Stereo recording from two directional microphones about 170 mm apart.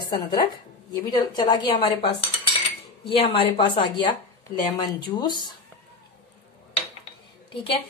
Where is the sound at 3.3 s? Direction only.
30° left (ahead or behind).